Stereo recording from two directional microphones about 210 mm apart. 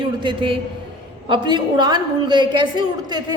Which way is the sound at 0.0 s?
20° right (ahead or behind).